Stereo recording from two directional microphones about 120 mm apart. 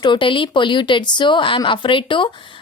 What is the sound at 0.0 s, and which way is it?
A woman's voice, 40° left (ahead or behind).